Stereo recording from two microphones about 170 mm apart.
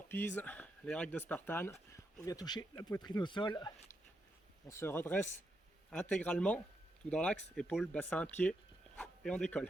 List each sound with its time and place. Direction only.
0.1 s speech: 10° left (ahead or behind)
2.2 s speech: 20° left (ahead or behind)
4.7 s speech: 15° left (ahead or behind)